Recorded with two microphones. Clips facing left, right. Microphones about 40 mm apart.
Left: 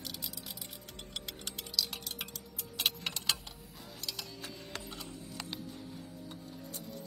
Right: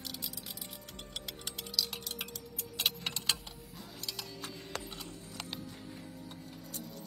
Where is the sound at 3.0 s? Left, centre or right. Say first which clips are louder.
Even; centre.